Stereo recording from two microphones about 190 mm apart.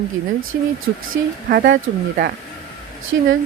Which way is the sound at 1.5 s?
50° right (ahead or behind).